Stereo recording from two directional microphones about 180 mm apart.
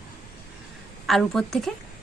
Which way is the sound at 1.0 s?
Centre (ahead or behind).